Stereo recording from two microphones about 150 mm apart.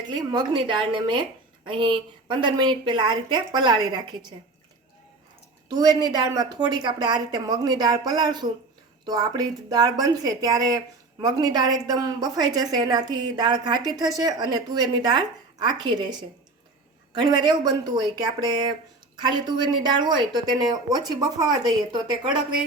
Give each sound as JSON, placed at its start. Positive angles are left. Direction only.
{"t": 0.1, "sound": "a woman's voice", "side_deg": -25}
{"t": 5.6, "sound": "a woman's voice", "side_deg": -25}